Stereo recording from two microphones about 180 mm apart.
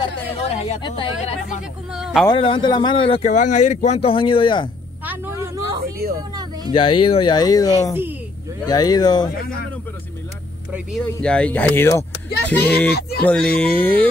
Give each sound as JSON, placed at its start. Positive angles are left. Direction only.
{"t": 0.0, "sound": "speech", "side_deg": 35}
{"t": 1.9, "sound": "speech", "side_deg": -5}
{"t": 2.2, "sound": "speech", "side_deg": 30}
{"t": 5.0, "sound": "vehicle", "side_deg": -10}
{"t": 6.0, "sound": "speech", "side_deg": -60}
{"t": 6.7, "sound": "speech", "side_deg": 30}
{"t": 10.7, "sound": "speech", "side_deg": 0}